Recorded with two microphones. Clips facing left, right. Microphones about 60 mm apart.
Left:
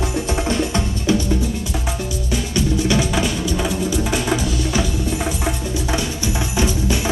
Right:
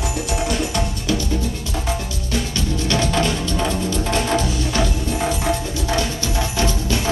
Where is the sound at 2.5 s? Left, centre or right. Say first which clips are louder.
Left 6 dB; centre.